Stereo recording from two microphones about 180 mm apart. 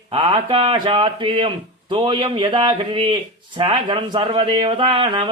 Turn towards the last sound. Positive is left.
turn(degrees=-30)  # may be behind; listen again after turning